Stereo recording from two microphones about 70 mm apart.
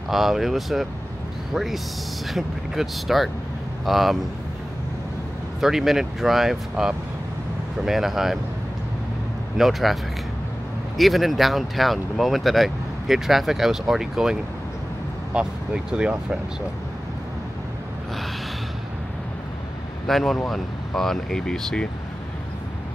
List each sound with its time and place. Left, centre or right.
0.1 s speech: centre
5.6 s speech: centre
9.6 s speech: centre
11.0 s speech: centre
20.1 s speech: centre